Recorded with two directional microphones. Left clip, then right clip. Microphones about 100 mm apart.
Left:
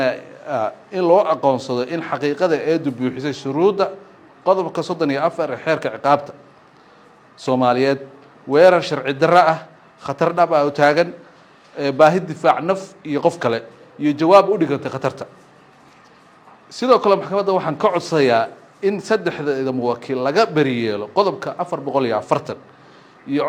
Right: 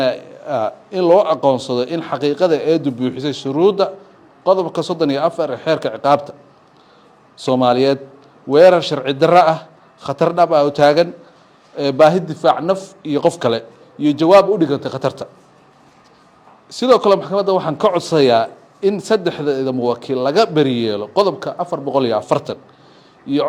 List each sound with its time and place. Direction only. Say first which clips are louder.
0.0 s a man's voice: right 2 dB; 40° right (ahead or behind)
7.3 s a man's voice: right 2 dB; 40° right (ahead or behind)
16.6 s a man's voice: right 2 dB; 40° right (ahead or behind)